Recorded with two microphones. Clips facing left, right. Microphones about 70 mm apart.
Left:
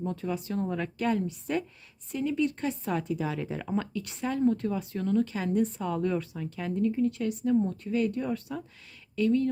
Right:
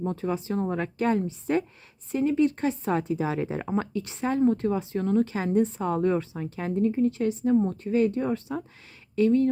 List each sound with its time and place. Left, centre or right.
0.0 s speech: right